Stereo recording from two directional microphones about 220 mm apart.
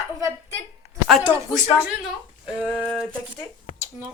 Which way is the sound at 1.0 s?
Centre (ahead or behind).